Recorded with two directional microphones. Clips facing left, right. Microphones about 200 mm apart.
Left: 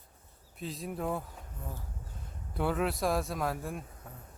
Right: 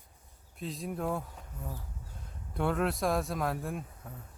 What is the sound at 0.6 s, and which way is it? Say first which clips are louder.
Speech: right 1 dB; centre (ahead or behind).